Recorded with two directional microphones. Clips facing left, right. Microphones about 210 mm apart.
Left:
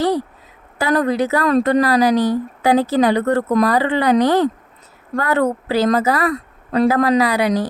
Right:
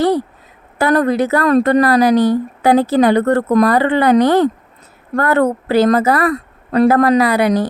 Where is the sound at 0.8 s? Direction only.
55° right (ahead or behind).